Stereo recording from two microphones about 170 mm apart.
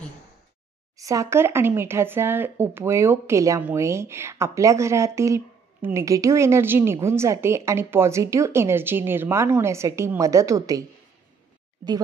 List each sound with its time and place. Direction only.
0.9 s speech: 20° right (ahead or behind)